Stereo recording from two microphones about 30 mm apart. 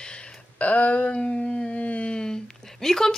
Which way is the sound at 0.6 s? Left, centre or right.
Left.